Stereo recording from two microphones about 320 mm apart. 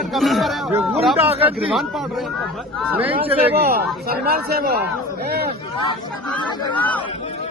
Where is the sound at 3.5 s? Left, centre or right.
Right.